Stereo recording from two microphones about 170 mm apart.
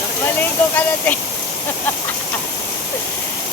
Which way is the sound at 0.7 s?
10° left (ahead or behind).